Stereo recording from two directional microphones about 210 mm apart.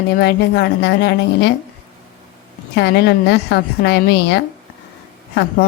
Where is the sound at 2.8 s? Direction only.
50° left (ahead or behind).